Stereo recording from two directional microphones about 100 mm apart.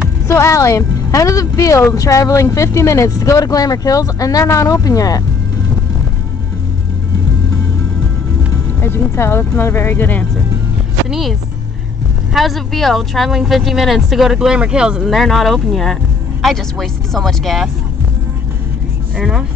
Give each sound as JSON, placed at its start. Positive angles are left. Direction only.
{"t": 0.3, "sound": "speech", "side_deg": 30}
{"t": 8.8, "sound": "speech", "side_deg": 25}
{"t": 11.1, "sound": "speech", "side_deg": 0}
{"t": 12.4, "sound": "speech", "side_deg": 0}
{"t": 19.1, "sound": "speech", "side_deg": -5}